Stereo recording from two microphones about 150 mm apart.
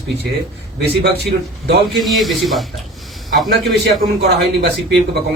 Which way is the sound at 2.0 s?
Centre (ahead or behind).